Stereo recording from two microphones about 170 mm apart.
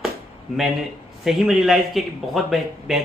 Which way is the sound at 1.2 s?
Centre (ahead or behind).